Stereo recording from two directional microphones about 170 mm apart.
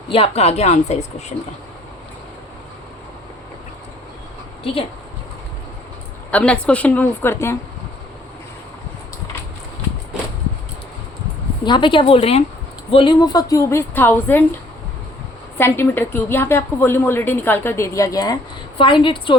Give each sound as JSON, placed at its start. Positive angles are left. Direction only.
{"t": 0.1, "sound": "a woman's voice", "side_deg": 35}
{"t": 4.6, "sound": "a woman's voice", "side_deg": 35}
{"t": 6.3, "sound": "a woman's voice", "side_deg": 5}
{"t": 11.6, "sound": "a woman's voice", "side_deg": 30}
{"t": 15.5, "sound": "a woman's voice", "side_deg": 15}